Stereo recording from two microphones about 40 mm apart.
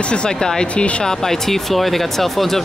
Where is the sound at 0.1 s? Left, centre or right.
Centre.